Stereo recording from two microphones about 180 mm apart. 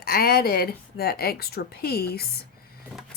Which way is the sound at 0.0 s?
60° left (ahead or behind).